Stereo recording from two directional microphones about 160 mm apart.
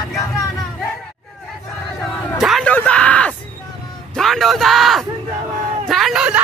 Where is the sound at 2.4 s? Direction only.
Centre (ahead or behind).